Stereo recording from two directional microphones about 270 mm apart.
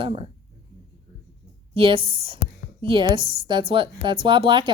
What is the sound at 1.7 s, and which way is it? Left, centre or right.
A woman's voice, centre.